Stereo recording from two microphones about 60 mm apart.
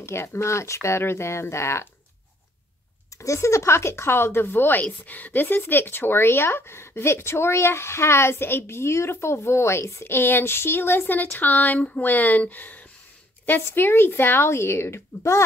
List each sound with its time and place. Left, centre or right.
0.0 s speech: left
3.2 s speech: left